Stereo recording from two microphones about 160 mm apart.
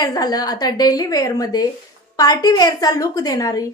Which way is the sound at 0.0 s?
25° left (ahead or behind).